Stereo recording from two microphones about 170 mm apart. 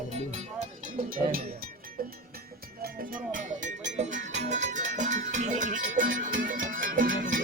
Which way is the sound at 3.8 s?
45° right (ahead or behind).